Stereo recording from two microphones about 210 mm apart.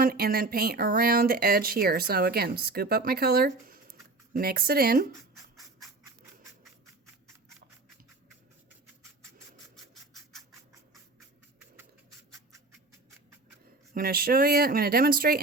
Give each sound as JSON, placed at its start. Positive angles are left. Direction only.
{"t": 0.0, "sound": "speech", "side_deg": -45}
{"t": 9.7, "sound": "scratch", "side_deg": 0}
{"t": 13.9, "sound": "speech", "side_deg": -45}